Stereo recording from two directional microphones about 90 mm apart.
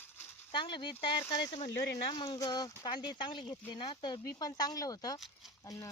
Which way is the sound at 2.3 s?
45° left (ahead or behind).